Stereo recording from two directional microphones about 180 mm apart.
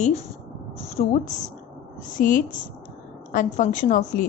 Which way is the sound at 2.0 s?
45° left (ahead or behind).